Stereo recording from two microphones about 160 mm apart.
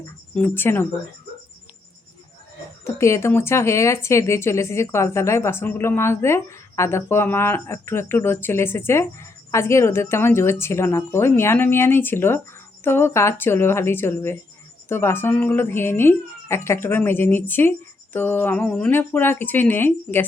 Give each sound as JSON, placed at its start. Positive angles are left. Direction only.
{"t": 0.3, "sound": "speech", "side_deg": 15}
{"t": 2.8, "sound": "speech", "side_deg": 20}